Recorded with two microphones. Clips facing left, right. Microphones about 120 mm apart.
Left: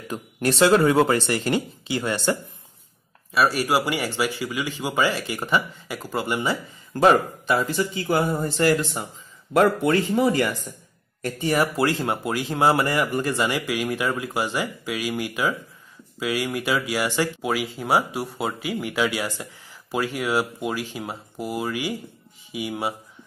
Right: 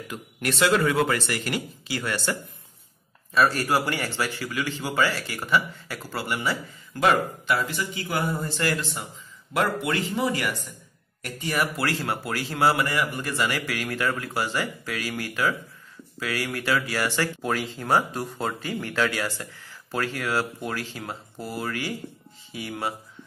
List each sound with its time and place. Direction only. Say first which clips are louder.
0.1 s speech: left 6 dB; 30° left (ahead or behind)
3.3 s speech: left 1 dB; 10° left (ahead or behind)
6.9 s speech: left 4 dB; 30° left (ahead or behind)
7.6 s speech: left 6 dB; 45° left (ahead or behind)
9.5 s speech: left 7 dB; 45° left (ahead or behind)
11.2 s speech: left 5 dB; 30° left (ahead or behind)